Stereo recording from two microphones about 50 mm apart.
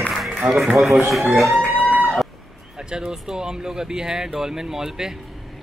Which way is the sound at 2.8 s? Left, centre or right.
Centre.